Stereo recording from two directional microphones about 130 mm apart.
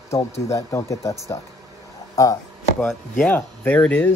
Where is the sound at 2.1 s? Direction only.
25° left (ahead or behind).